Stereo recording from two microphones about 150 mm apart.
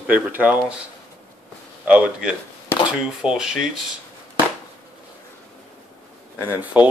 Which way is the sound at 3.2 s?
5° right (ahead or behind).